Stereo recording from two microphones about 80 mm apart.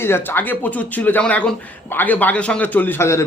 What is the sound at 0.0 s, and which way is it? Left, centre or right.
A man's voice, left.